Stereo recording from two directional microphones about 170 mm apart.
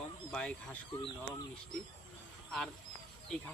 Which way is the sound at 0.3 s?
5° left (ahead or behind).